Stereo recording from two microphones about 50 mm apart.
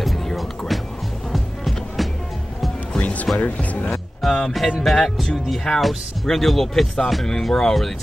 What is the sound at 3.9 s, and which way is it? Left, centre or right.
Music, centre.